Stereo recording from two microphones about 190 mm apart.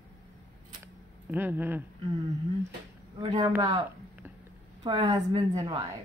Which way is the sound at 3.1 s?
25° right (ahead or behind).